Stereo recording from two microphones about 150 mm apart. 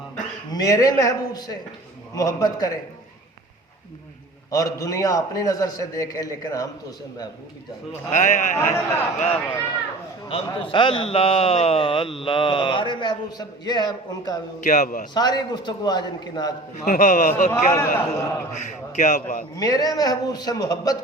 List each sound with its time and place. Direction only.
0.5 s a man's voice: 25° left (ahead or behind)
4.5 s a man's voice: 20° left (ahead or behind)
8.1 s a man's voice: 55° left (ahead or behind)
8.5 s a man's voice: 20° left (ahead or behind)
9.1 s a man's voice: 45° left (ahead or behind); by 14.3 s 25° left (ahead or behind)
14.6 s a man's voice: 55° left (ahead or behind)
15.1 s a man's voice: 30° left (ahead or behind)
16.8 s a man's voice: 60° left (ahead or behind)
17.7 s a man's voice: 20° left (ahead or behind)
18.6 s a man's voice: 55° left (ahead or behind)
19.5 s a man's voice: 25° left (ahead or behind)